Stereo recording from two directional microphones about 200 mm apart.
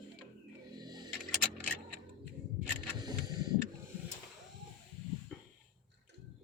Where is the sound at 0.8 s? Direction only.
20° right (ahead or behind).